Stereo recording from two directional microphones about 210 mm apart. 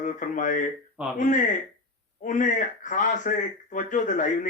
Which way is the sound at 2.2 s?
40° left (ahead or behind).